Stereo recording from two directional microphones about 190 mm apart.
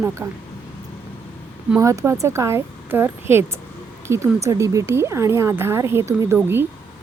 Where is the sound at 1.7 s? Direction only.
15° right (ahead or behind).